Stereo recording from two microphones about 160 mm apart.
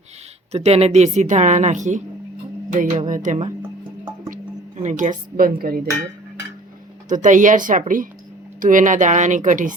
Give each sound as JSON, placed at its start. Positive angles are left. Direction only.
{"t": 0.5, "sound": "a woman's voice", "side_deg": -40}
{"t": 4.8, "sound": "speech", "side_deg": -50}
{"t": 7.1, "sound": "a woman's voice", "side_deg": -55}